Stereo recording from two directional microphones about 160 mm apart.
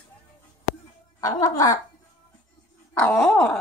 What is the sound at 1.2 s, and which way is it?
Music, 20° left (ahead or behind).